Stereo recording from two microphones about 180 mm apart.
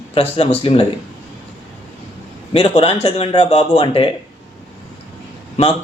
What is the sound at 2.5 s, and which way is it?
Speech, 35° left (ahead or behind).